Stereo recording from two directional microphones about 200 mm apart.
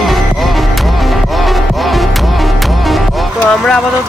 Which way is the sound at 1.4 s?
Centre (ahead or behind).